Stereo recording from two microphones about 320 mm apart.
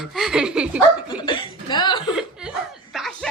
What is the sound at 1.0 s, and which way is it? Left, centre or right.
Cough, centre.